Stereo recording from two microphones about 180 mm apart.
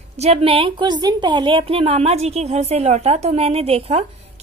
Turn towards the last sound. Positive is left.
turn(degrees=-35)  # may be behind; listen again after turning